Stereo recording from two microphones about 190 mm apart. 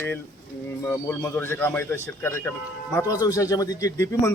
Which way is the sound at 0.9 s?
10° left (ahead or behind).